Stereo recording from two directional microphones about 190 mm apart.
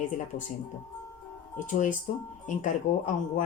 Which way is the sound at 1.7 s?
40° left (ahead or behind).